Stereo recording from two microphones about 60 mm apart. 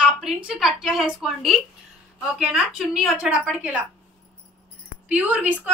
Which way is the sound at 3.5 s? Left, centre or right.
Right.